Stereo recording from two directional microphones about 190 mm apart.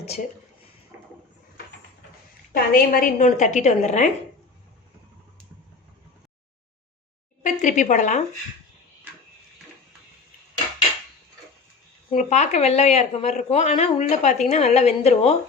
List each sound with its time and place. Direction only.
2.5 s a woman's voice: 50° left (ahead or behind)
7.4 s a woman's voice: 40° left (ahead or behind)
12.1 s a woman's voice: 40° left (ahead or behind)